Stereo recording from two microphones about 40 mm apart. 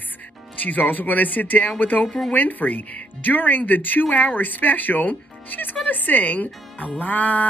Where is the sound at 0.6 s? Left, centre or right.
Left.